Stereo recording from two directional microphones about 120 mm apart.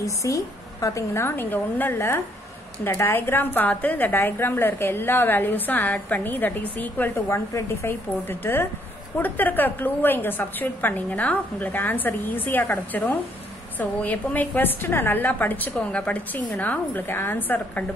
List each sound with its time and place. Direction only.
0.0 s a woman's voice: 25° left (ahead or behind)